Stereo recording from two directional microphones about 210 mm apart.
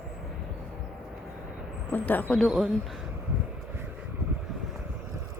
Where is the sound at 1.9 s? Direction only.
10° left (ahead or behind).